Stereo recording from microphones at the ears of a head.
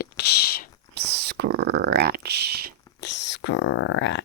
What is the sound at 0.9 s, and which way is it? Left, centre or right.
Speech, right.